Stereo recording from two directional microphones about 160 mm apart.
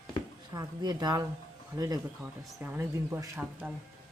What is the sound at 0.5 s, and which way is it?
Speech, 25° right (ahead or behind).